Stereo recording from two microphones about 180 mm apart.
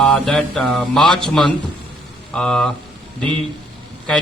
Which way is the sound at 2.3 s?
5° left (ahead or behind).